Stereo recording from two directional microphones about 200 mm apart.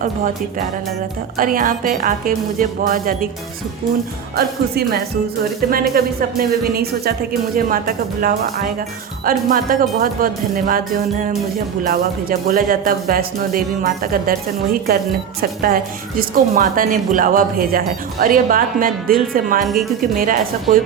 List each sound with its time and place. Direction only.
1.4 s a woman's voice: 45° right (ahead or behind)
4.4 s a woman's voice: 50° right (ahead or behind)
6.0 s a woman's voice: 45° right (ahead or behind)
7.7 s a woman's voice: 45° right (ahead or behind)
11.8 s a woman's voice: 45° right (ahead or behind)
19.6 s speech: centre (ahead or behind)
20.0 s a woman's voice: 45° right (ahead or behind)